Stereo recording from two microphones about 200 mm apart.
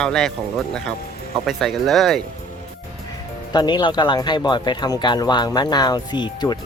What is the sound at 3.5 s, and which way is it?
Speech, 20° left (ahead or behind).